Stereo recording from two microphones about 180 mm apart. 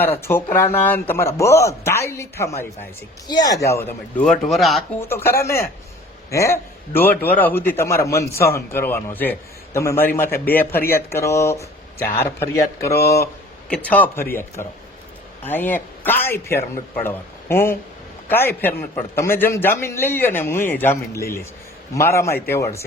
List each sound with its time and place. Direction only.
0.0 s a man's voice: 10° left (ahead or behind)
4.2 s speech: centre (ahead or behind)
4.9 s a man's voice: 15° left (ahead or behind)